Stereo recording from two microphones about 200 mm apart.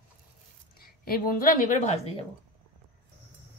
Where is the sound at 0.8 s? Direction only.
45° left (ahead or behind).